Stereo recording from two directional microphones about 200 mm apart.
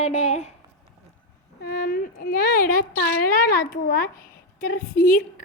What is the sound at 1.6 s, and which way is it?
A woman's voice, 45° left (ahead or behind).